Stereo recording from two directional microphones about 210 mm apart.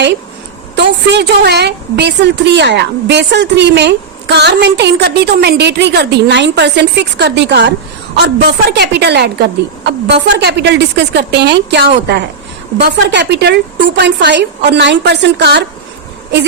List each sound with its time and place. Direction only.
0.8 s a woman's voice: 50° right (ahead or behind)
8.7 s a woman's voice: 50° right (ahead or behind)